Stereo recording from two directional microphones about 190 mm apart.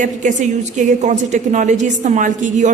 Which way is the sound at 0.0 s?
40° right (ahead or behind).